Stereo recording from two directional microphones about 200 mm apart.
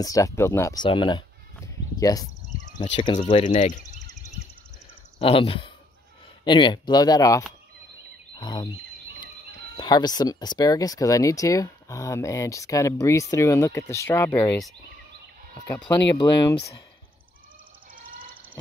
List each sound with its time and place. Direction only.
0.0 s speech: 15° left (ahead or behind)
3.5 s speech: 40° left (ahead or behind)
4.0 s a sound: 15° left (ahead or behind)
5.2 s speech: 25° left (ahead or behind)
8.4 s a sound: 20° left (ahead or behind)
9.8 s speech: 20° left (ahead or behind)